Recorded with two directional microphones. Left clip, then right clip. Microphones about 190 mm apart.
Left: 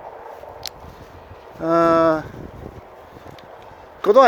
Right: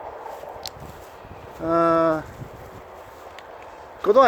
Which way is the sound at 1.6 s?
40° left (ahead or behind).